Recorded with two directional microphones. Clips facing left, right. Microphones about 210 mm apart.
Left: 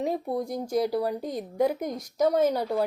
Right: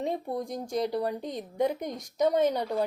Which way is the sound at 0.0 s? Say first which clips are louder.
Left 3 dB; 5° left (ahead or behind).